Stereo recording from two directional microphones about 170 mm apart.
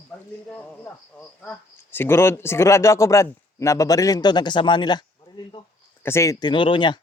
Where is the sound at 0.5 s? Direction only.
5° left (ahead or behind); by 5.6 s 25° left (ahead or behind).